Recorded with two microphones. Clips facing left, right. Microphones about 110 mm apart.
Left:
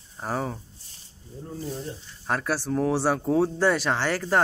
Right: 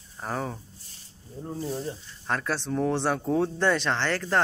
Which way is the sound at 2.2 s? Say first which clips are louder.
Left 2 dB; 5° left (ahead or behind).